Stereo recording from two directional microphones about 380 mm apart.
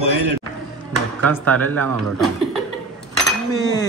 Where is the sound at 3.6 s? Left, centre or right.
Centre.